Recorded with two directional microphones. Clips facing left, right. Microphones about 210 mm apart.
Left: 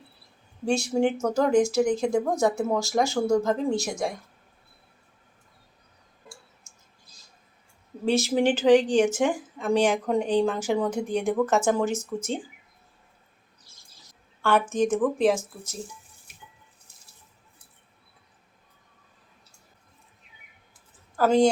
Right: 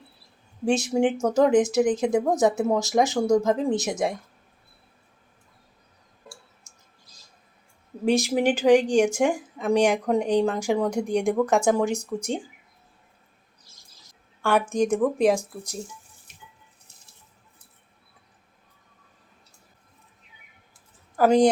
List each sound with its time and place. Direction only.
0.6 s speech: 20° right (ahead or behind)
8.0 s speech: 15° right (ahead or behind)
14.4 s speech: 10° right (ahead or behind)
21.2 s speech: 15° right (ahead or behind)